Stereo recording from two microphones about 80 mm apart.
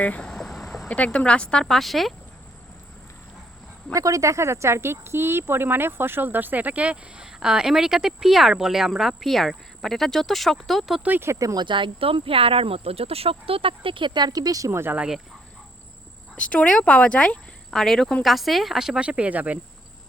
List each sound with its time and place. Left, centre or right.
0.0 s a sound: centre
0.9 s speech: centre
3.9 s speech: right; by 11.0 s centre
11.0 s speech: right
11.3 s speech: right
11.6 s speech: right
13.8 s speech: right
14.7 s speech: right
14.9 s speech: centre
16.3 s speech: centre